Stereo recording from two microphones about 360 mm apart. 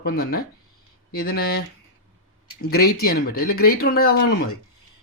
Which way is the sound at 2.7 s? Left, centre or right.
Left.